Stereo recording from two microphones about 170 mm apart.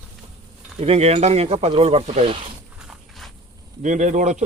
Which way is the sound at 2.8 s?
Centre (ahead or behind).